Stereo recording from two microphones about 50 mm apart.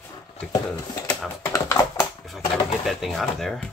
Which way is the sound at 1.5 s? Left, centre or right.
Left.